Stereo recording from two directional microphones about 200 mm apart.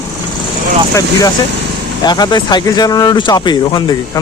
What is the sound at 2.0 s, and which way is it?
Speech, 20° left (ahead or behind).